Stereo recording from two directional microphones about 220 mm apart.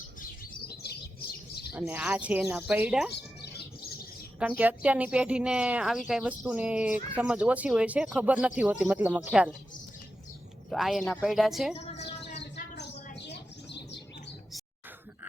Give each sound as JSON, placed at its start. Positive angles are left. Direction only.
{"t": 0.8, "sound": "bird", "side_deg": 45}
{"t": 1.7, "sound": "speech", "side_deg": -5}
{"t": 3.1, "sound": "bird", "side_deg": 50}
{"t": 4.4, "sound": "speech", "side_deg": -5}
{"t": 10.7, "sound": "speech", "side_deg": 0}
{"t": 11.7, "sound": "chirp", "side_deg": 30}
{"t": 12.3, "sound": "bird", "side_deg": 50}